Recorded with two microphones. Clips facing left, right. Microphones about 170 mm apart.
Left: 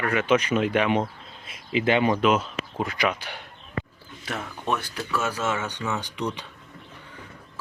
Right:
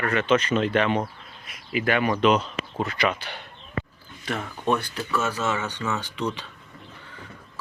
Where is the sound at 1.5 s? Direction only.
25° left (ahead or behind).